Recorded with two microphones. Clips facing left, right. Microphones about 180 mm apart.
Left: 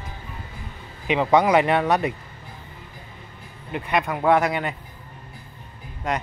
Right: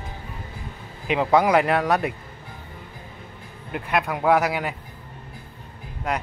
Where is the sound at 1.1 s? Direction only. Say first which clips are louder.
Left 1 dB; centre (ahead or behind).